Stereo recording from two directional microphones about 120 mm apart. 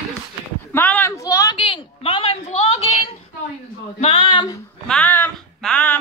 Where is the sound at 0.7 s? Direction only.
15° left (ahead or behind).